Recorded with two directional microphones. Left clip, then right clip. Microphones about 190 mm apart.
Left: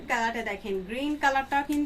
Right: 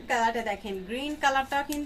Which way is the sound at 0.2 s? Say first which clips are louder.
Right 2 dB; 15° left (ahead or behind).